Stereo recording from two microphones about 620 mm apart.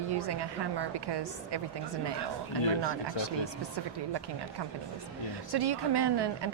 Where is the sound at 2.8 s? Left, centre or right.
Right.